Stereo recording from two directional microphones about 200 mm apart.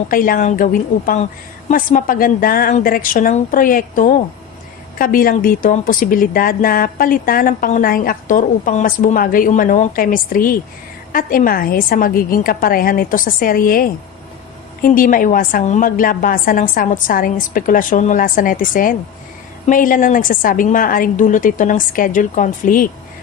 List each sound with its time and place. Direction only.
0.1 s a woman's voice: 45° left (ahead or behind)